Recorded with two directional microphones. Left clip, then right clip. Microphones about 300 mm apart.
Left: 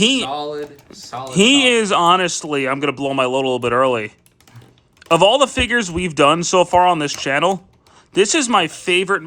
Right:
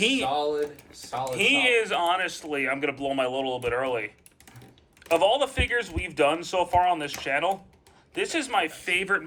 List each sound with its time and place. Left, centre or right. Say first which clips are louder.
0.0 s speech: left 8 dB; centre
0.3 s speech: left 1 dB; left
0.9 s speech: left 2 dB; centre
5.1 s speech: left 9 dB; centre